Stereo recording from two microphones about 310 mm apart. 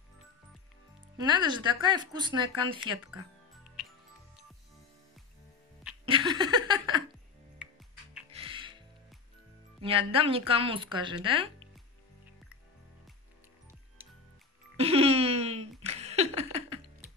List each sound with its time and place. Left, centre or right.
1.1 s speech: centre
6.0 s laughter: centre
8.3 s music: centre
9.8 s speech: centre
14.8 s giggle: centre
15.8 s a sound: right